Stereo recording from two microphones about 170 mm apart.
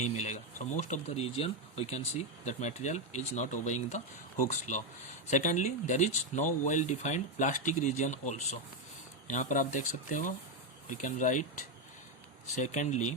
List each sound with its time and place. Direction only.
0.2 s speech: 45° left (ahead or behind)
12.5 s speech: 45° left (ahead or behind)